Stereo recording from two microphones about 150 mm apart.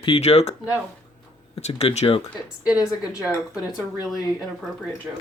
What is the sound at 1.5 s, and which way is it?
Speech, 45° left (ahead or behind).